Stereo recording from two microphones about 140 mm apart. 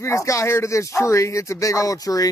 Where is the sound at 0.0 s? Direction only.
20° left (ahead or behind).